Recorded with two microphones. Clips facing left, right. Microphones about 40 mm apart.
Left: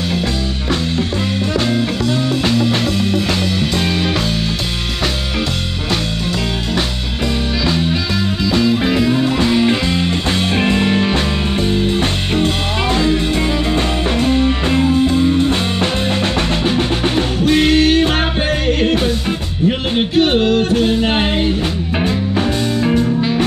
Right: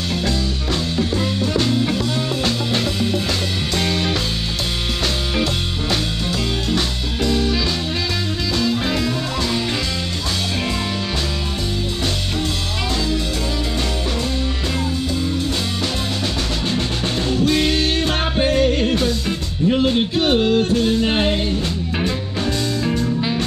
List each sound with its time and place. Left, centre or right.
3.7 s music: centre
7.2 s music: left
8.8 s music: centre; by 11.1 s left
12.9 s music: left
18.8 s music: left